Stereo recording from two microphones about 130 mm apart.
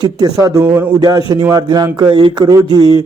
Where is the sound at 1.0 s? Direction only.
30° right (ahead or behind).